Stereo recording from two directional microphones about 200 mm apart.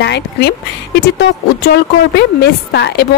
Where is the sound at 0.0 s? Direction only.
60° left (ahead or behind).